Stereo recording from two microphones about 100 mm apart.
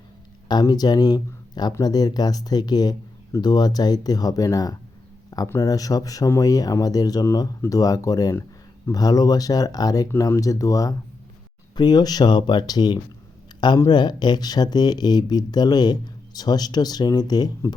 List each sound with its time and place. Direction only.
0.4 s speech: 45° left (ahead or behind)